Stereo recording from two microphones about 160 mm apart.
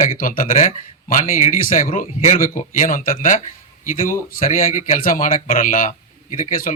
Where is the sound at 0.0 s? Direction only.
60° left (ahead or behind).